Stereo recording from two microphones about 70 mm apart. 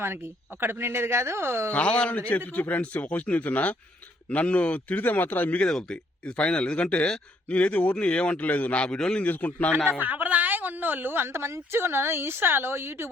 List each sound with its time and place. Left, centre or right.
0.0 s a woman's voice: right
1.7 s a man's voice: centre
5.6 s a man's voice: centre
9.2 s a man's voice: left
10.0 s a woman's voice: right